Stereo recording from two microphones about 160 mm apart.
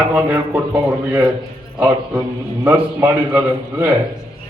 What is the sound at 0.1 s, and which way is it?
A man's voice, 10° right (ahead or behind).